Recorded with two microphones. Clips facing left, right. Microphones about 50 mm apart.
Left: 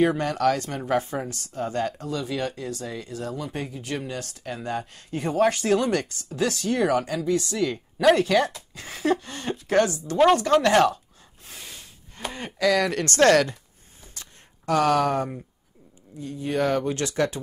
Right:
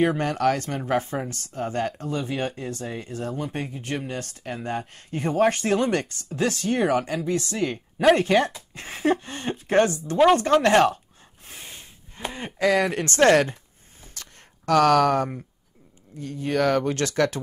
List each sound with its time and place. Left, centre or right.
0.0 s a woman's voice: right
11.4 s gasp: right
12.5 s a woman's voice: right
14.0 s a sound: right
16.2 s speech: right